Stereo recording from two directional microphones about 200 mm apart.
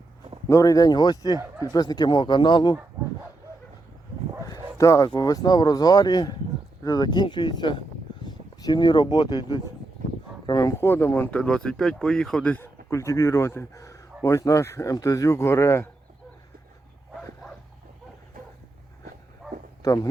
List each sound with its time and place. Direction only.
0.4 s speech: 15° left (ahead or behind)
4.4 s speech: 15° left (ahead or behind)
19.4 s bow-wow: centre (ahead or behind)
19.8 s speech: 20° left (ahead or behind)